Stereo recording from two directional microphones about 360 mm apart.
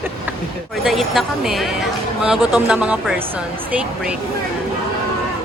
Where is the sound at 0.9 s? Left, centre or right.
Centre.